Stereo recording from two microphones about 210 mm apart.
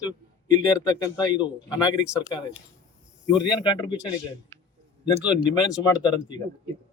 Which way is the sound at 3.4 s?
20° left (ahead or behind).